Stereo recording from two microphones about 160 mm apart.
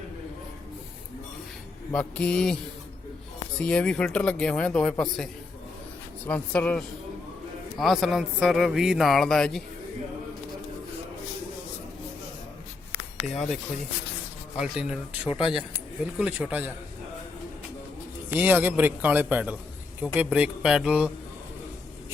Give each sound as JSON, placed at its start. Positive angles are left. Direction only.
{"t": 1.9, "sound": "speech", "side_deg": 10}
{"t": 3.6, "sound": "speech", "side_deg": 5}
{"t": 13.2, "sound": "speech", "side_deg": 0}
{"t": 15.3, "sound": "speech", "side_deg": 35}
{"t": 16.1, "sound": "a man's voice", "side_deg": -10}
{"t": 18.3, "sound": "a man's voice", "side_deg": -10}